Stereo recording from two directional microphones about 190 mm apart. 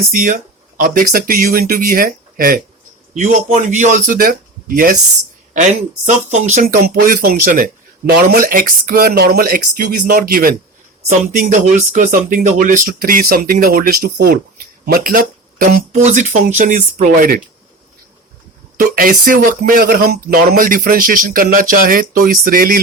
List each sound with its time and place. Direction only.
0.1 s speech: 45° right (ahead or behind)
6.2 s speech: 40° right (ahead or behind)
18.8 s speech: 50° right (ahead or behind)